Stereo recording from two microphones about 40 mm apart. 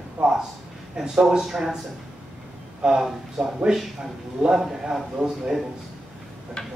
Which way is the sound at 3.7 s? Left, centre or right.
Centre.